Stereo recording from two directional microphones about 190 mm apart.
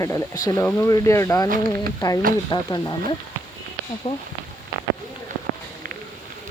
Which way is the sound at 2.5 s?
20° left (ahead or behind).